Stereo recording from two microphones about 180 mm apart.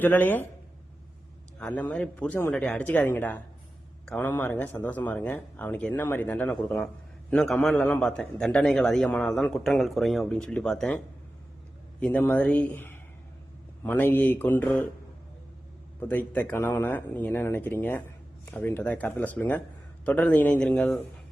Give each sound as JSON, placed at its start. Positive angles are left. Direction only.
{"t": 0.0, "sound": "speech", "side_deg": 10}
{"t": 1.5, "sound": "speech", "side_deg": 5}
{"t": 16.0, "sound": "speech", "side_deg": 10}